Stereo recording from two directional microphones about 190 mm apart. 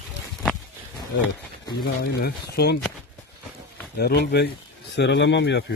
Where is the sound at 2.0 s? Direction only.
55° left (ahead or behind).